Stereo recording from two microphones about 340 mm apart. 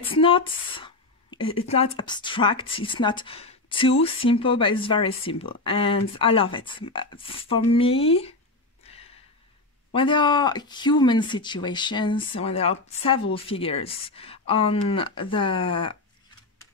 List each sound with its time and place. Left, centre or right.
0.0 s a sound: centre
1.7 s speech: centre
8.8 s gasp: centre
9.9 s speech: centre